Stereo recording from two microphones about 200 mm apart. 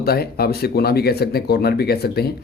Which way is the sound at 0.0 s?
50° left (ahead or behind).